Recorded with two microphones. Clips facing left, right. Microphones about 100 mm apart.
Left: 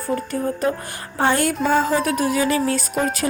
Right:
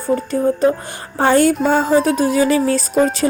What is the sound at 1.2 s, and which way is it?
Speech, 30° right (ahead or behind).